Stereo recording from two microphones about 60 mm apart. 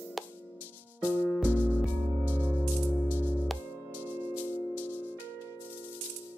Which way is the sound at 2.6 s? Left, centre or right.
Centre.